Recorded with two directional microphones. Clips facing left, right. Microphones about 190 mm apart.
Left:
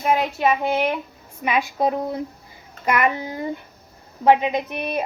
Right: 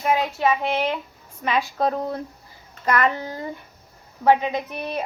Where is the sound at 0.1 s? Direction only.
15° left (ahead or behind).